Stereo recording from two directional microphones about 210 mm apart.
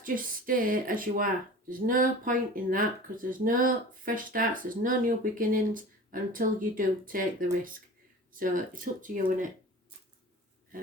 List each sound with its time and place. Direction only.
0.0 s speech: 40° right (ahead or behind)